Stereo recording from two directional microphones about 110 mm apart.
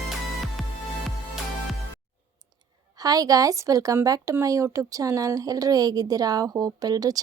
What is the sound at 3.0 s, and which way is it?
Speech, 35° right (ahead or behind).